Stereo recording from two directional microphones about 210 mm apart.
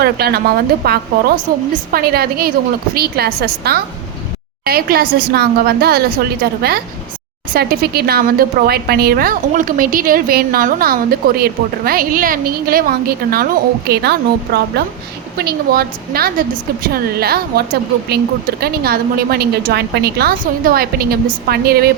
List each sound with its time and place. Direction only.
0.0 s a woman's voice: 50° right (ahead or behind)